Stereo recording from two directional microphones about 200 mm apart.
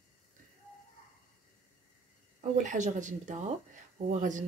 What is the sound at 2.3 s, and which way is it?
A woman's voice, 35° right (ahead or behind).